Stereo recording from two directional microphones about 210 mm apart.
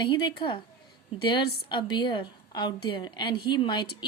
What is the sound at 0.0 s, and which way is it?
Speech, 20° left (ahead or behind).